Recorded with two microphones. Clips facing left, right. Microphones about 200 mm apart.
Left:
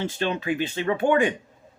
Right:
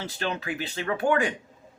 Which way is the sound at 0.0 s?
20° left (ahead or behind).